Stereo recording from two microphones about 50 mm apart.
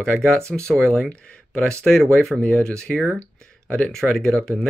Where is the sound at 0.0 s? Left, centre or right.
Centre.